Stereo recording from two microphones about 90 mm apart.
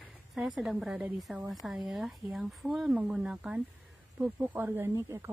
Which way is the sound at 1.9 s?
Centre (ahead or behind).